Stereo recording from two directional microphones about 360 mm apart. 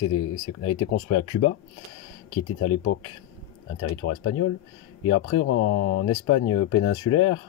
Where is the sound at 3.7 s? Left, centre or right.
Left.